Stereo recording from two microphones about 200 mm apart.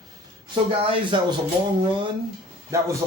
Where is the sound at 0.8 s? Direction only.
25° right (ahead or behind).